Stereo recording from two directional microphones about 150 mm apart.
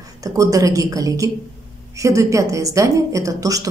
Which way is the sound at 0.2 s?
25° right (ahead or behind).